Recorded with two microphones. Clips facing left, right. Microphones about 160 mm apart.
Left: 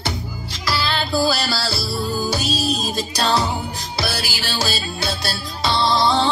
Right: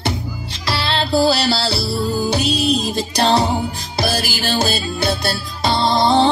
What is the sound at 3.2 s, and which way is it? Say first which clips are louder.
Music: right 4 dB; 25° right (ahead or behind).